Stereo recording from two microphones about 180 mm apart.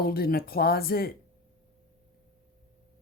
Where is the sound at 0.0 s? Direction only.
55° left (ahead or behind).